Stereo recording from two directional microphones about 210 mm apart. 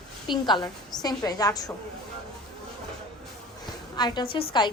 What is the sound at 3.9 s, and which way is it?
Speech, 20° left (ahead or behind).